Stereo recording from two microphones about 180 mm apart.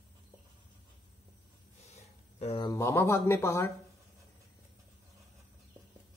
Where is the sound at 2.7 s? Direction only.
15° left (ahead or behind).